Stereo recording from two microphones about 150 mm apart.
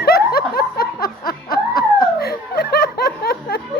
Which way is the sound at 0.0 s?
90° left.